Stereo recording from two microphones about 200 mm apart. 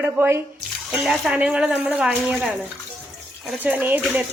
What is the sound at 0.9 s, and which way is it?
A woman's voice, centre (ahead or behind).